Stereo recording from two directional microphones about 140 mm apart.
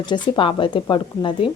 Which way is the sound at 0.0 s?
35° left (ahead or behind).